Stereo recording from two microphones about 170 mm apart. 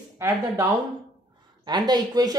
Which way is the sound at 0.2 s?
15° right (ahead or behind).